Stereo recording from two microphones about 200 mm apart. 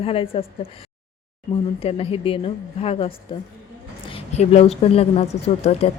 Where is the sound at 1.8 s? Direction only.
30° left (ahead or behind).